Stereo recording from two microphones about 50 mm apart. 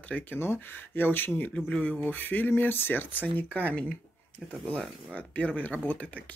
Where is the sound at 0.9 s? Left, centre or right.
Left.